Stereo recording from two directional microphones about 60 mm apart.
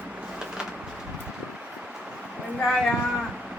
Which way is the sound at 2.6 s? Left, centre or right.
Centre.